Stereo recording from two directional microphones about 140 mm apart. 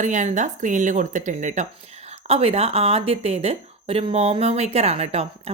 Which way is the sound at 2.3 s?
45° right (ahead or behind).